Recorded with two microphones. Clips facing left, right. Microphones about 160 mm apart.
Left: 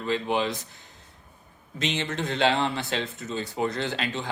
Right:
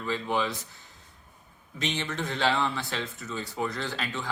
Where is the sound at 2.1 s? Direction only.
20° left (ahead or behind).